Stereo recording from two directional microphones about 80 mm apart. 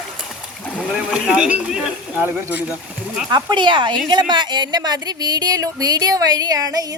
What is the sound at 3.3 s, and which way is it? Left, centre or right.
Speech, right.